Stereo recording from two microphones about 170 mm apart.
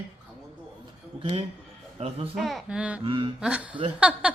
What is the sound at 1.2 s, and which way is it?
Speech, 35° right (ahead or behind).